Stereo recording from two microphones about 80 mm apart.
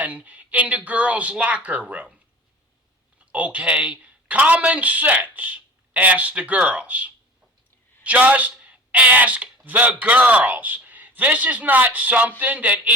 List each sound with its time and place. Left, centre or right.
0.0 s a man's voice: centre